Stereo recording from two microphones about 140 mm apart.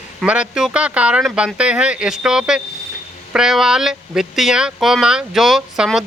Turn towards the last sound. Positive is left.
turn(degrees=0)  # may be behind; listen again after turning